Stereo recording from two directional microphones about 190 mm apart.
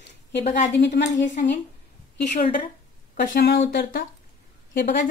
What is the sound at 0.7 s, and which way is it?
Speech, 70° left (ahead or behind).